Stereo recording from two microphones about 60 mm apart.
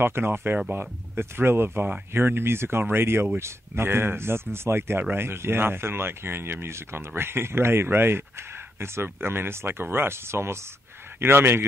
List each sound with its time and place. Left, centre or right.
0.0 s speech: right